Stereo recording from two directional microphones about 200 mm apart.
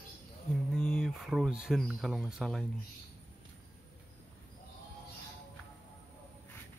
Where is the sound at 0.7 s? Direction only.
Centre (ahead or behind).